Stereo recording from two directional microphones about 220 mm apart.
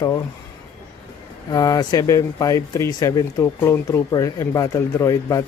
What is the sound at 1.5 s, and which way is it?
Speech, 15° left (ahead or behind).